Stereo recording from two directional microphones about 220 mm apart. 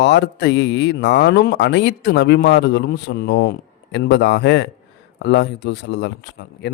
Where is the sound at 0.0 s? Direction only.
50° left (ahead or behind).